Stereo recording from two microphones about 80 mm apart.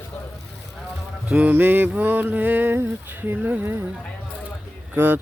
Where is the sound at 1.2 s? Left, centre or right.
Centre.